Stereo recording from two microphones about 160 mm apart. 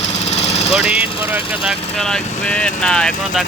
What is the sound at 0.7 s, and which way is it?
Speech, 5° right (ahead or behind).